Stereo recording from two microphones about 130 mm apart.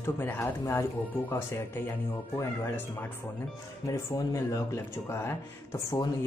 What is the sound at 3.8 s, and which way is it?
Speech, 25° left (ahead or behind).